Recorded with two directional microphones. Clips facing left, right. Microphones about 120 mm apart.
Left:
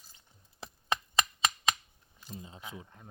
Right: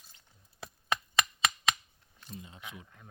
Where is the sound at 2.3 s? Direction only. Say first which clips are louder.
Left 1 dB; 30° left (ahead or behind).